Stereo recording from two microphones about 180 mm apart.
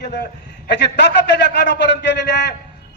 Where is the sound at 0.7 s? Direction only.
75° left (ahead or behind).